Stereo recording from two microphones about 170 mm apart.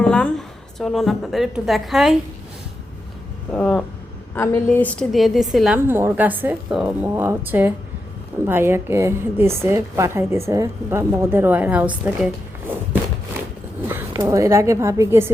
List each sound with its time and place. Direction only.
0.0 s a woman's voice: 5° left (ahead or behind)
3.5 s a woman's voice: 10° left (ahead or behind)
5.1 s a woman's voice: centre (ahead or behind)
13.8 s speech: 15° right (ahead or behind)